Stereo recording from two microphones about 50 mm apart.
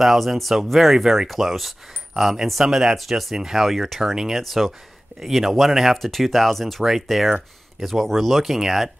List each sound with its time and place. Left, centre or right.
0.0 s speech: centre